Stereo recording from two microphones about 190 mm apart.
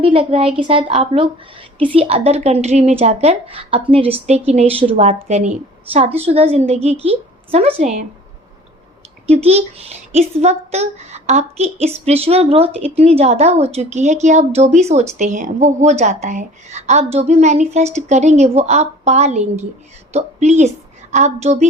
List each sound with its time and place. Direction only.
0.0 s a woman's voice: 30° right (ahead or behind)
9.2 s a child's voice: 35° right (ahead or behind)